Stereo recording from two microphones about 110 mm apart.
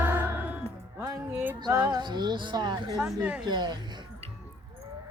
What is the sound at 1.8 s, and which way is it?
Music, 40° right (ahead or behind).